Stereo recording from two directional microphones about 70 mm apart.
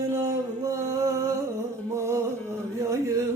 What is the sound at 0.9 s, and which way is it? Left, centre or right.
Music, right.